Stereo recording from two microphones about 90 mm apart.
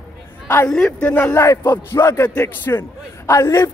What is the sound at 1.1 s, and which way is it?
A man's voice, 25° left (ahead or behind).